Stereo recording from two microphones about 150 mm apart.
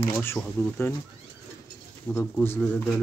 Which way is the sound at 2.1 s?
15° left (ahead or behind).